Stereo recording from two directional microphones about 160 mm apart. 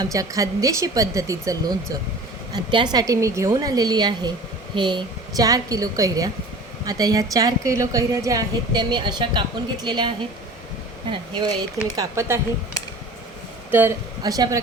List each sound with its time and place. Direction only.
0.0 s a woman's voice: 20° right (ahead or behind)
11.1 s a woman's voice: 30° right (ahead or behind)
11.9 s speech: 15° right (ahead or behind)
13.7 s speech: 15° right (ahead or behind)
14.2 s a woman's voice: 25° right (ahead or behind)